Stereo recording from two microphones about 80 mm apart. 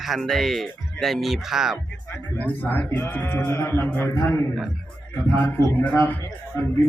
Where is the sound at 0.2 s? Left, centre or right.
Centre.